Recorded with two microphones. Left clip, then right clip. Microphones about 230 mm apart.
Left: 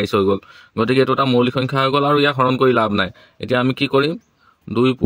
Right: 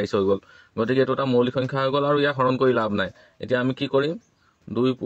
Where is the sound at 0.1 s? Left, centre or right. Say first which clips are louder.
Left 5 dB; left.